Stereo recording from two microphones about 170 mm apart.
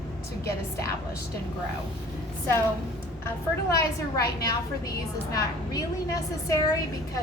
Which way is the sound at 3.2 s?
20° left (ahead or behind).